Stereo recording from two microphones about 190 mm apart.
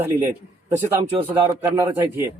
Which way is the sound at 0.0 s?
15° right (ahead or behind).